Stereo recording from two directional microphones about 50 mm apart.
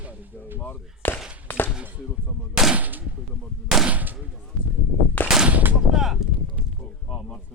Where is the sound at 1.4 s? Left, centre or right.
Left.